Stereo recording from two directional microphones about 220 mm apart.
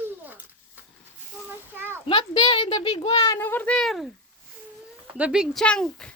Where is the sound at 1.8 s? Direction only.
10° right (ahead or behind).